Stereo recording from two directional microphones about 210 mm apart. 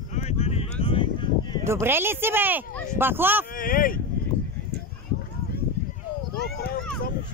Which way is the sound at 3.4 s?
40° left (ahead or behind).